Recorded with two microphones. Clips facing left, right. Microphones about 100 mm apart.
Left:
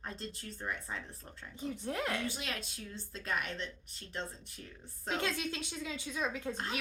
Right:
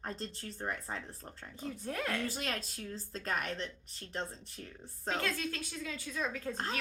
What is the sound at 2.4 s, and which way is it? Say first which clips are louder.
A woman's voice: right 3 dB; 45° right (ahead or behind).